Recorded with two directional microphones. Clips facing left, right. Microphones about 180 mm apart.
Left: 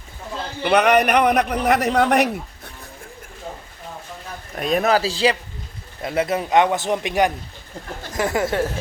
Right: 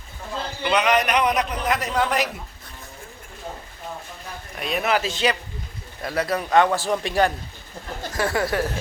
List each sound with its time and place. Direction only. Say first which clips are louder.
0.6 s a man's voice: left 5 dB; 60° left (ahead or behind)
4.5 s a man's voice: left 5 dB; 45° left (ahead or behind); by 8.6 s 20° left (ahead or behind)